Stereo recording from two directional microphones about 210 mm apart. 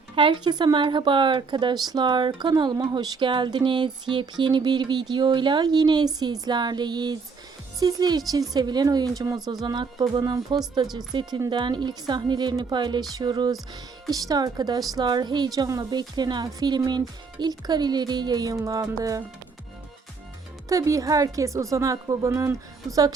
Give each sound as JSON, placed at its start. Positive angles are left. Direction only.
{"t": 0.2, "sound": "a woman's voice", "side_deg": -20}
{"t": 20.7, "sound": "a woman's voice", "side_deg": -15}